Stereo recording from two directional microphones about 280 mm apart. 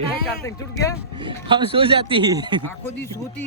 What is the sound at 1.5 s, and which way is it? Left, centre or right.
Speech, centre.